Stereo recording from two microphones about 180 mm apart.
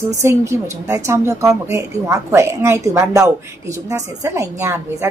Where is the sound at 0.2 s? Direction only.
15° right (ahead or behind).